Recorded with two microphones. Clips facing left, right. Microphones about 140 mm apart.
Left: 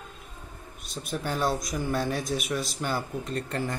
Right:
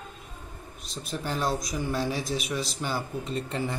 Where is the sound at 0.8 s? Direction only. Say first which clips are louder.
Left 1 dB; centre (ahead or behind).